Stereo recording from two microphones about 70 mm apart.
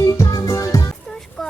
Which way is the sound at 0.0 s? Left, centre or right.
Left.